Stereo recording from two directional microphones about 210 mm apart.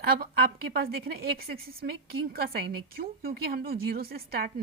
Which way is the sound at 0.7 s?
45° right (ahead or behind).